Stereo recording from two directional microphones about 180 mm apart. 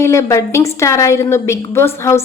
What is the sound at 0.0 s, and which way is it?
A woman's voice, 15° left (ahead or behind).